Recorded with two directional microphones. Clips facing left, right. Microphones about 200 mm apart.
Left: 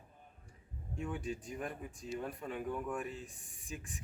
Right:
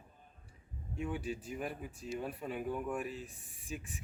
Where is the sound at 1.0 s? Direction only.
5° right (ahead or behind).